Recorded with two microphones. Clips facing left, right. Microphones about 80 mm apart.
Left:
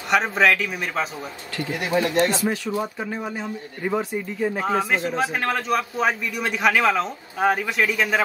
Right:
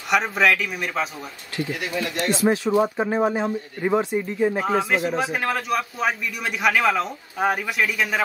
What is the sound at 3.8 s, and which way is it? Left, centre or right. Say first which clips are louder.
Speech: right 3 dB; centre.